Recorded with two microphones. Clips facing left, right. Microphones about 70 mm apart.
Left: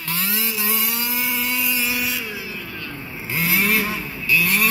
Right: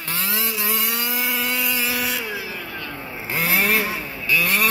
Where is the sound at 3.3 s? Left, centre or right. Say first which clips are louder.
Even; right.